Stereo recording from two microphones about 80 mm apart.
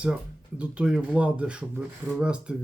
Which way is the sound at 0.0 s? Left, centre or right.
Centre.